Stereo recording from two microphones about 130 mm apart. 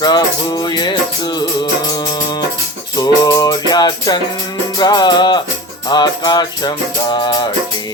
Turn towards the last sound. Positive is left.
turn(degrees=35)  # may be behind; listen again after turning